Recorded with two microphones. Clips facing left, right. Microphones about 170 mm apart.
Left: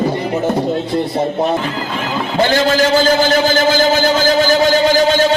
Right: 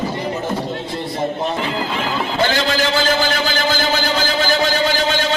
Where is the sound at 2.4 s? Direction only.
45° left (ahead or behind).